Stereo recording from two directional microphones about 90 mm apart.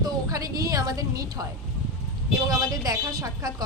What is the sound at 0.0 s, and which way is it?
A woman's voice, 40° right (ahead or behind).